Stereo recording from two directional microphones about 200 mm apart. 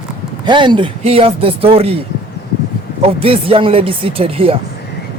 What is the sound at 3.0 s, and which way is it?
Speech, 30° right (ahead or behind).